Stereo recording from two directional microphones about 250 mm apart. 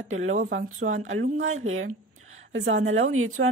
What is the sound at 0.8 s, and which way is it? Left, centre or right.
A woman's voice, right.